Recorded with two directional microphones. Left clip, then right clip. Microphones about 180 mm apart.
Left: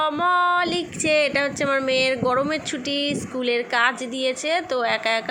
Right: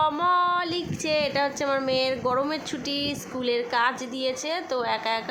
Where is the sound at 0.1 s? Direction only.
5° left (ahead or behind).